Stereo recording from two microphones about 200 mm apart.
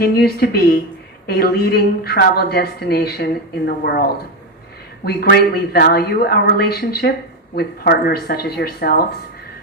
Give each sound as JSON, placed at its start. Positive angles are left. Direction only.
{"t": 0.0, "sound": "a woman's voice", "side_deg": 50}